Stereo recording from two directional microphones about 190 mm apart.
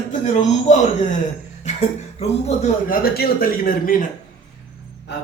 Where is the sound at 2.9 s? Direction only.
55° left (ahead or behind).